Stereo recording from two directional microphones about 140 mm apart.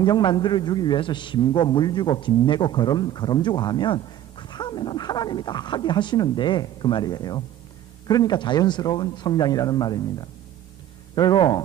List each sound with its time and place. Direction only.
0.0 s a man's voice: 35° left (ahead or behind)